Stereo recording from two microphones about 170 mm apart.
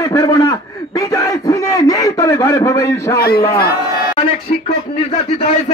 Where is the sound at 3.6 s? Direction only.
65° left (ahead or behind).